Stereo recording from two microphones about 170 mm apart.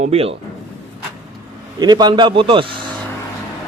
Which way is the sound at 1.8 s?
25° right (ahead or behind).